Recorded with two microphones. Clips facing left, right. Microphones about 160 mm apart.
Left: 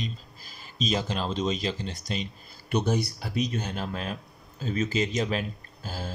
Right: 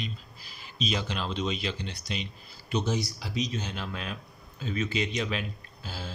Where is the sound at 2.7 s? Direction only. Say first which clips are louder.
Left 3 dB; 55° left (ahead or behind).